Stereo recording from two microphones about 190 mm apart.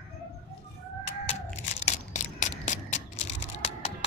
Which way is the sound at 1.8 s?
40° left (ahead or behind).